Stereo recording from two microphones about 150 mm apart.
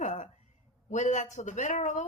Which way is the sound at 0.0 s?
45° left (ahead or behind).